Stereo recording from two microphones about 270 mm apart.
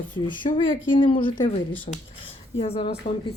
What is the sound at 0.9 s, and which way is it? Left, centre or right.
Speech, centre.